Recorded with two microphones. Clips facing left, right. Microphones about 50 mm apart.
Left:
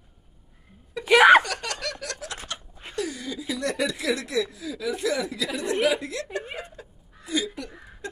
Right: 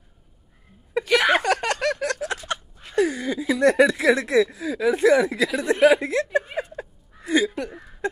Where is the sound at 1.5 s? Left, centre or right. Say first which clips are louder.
Right 10 dB; right.